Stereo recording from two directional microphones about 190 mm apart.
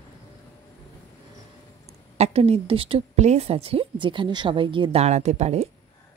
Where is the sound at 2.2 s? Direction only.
35° right (ahead or behind).